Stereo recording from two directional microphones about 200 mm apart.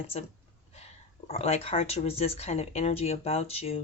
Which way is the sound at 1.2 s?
30° left (ahead or behind).